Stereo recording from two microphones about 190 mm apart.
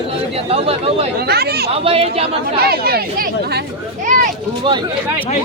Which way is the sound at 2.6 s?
55° right (ahead or behind).